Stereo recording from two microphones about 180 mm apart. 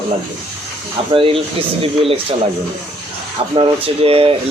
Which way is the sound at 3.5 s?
30° right (ahead or behind).